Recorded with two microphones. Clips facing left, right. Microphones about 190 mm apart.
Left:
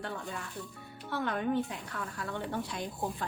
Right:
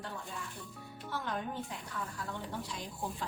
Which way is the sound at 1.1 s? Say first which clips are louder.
Left 7 dB; 65° left (ahead or behind).